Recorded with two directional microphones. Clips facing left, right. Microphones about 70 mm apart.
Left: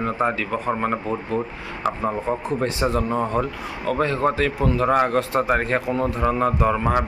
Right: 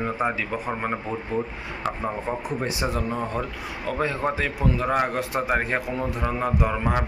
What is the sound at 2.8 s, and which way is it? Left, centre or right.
Speech, centre.